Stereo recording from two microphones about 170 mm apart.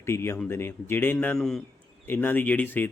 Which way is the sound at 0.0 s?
15° left (ahead or behind).